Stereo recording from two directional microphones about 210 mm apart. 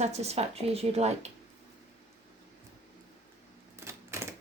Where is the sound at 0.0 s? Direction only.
30° right (ahead or behind).